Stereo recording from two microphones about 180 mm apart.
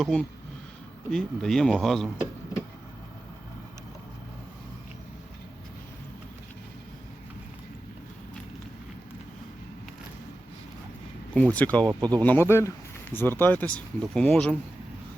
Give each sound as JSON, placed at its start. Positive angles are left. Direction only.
{"t": 0.0, "sound": "speech", "side_deg": 0}
{"t": 11.3, "sound": "speech", "side_deg": 5}
{"t": 11.9, "sound": "speech", "side_deg": -20}
{"t": 12.2, "sound": "speech", "side_deg": 10}